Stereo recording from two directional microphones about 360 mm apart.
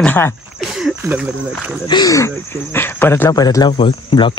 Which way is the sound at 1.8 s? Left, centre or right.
Centre.